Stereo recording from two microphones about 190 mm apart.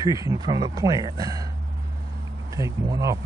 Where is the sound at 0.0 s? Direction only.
20° right (ahead or behind).